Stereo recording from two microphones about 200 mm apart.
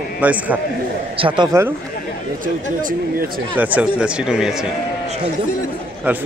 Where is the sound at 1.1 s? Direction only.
25° right (ahead or behind).